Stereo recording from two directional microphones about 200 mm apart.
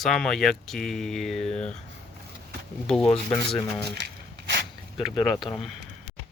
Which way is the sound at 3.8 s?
55° right (ahead or behind).